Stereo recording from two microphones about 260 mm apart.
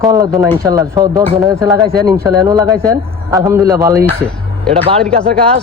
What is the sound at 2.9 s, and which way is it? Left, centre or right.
A man's voice, centre.